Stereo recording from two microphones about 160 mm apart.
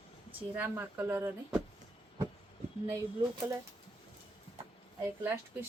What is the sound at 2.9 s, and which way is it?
Speech, 15° right (ahead or behind).